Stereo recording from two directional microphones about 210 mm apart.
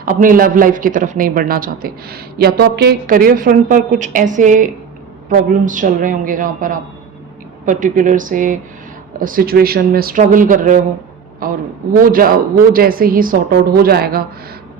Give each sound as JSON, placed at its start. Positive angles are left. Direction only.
{"t": 0.0, "sound": "a man's voice", "side_deg": -40}